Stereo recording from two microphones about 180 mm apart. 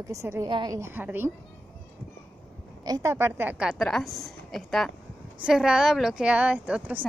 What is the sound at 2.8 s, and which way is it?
A woman's voice, 20° right (ahead or behind).